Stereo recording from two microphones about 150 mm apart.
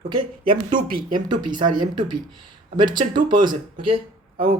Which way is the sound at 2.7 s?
30° right (ahead or behind).